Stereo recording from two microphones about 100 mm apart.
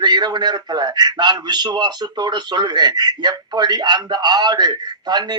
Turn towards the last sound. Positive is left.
turn(degrees=-45)  # may be behind; listen again after turning